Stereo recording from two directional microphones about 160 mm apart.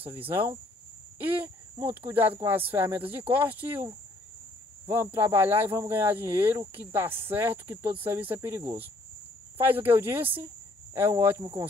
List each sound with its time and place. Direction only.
0.1 s speech: 10° right (ahead or behind)
5.1 s speech: 15° right (ahead or behind)